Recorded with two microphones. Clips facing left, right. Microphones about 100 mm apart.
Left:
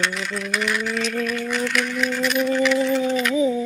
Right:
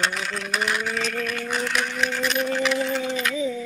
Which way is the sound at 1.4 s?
30° right (ahead or behind).